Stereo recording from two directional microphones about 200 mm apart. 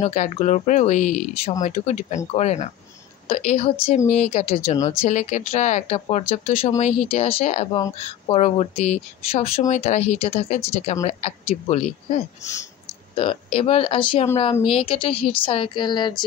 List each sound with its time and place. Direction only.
0.0 s speech: 35° left (ahead or behind)